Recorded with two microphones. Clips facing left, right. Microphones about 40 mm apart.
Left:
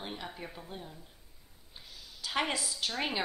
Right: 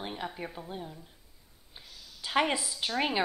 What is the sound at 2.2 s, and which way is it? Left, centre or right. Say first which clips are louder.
A woman's voice: right 5 dB; centre.